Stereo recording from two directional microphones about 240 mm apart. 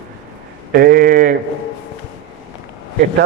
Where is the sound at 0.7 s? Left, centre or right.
Right.